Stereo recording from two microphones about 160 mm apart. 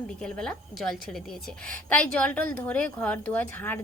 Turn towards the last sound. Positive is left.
turn(degrees=10)  # may be behind; listen again after turning